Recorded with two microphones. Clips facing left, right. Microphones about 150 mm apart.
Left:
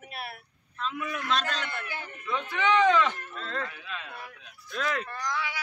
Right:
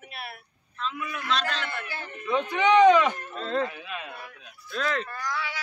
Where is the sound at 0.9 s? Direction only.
45° left (ahead or behind).